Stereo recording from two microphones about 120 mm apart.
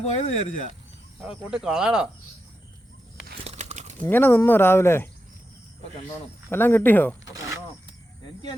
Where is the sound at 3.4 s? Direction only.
75° right (ahead or behind).